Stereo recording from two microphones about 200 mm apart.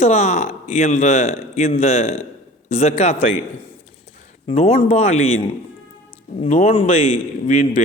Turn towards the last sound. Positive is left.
turn(degrees=35)  # may be behind; listen again after turning